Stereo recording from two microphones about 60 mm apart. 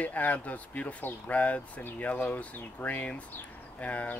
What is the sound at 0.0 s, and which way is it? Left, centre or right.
Speech, left.